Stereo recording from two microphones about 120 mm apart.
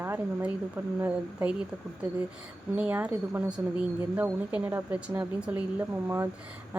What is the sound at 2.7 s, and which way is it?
Speech, 10° right (ahead or behind).